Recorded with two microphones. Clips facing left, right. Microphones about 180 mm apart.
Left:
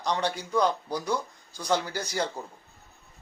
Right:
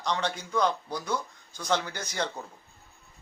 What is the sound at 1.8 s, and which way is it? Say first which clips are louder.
Speech: left 4 dB; 35° left (ahead or behind).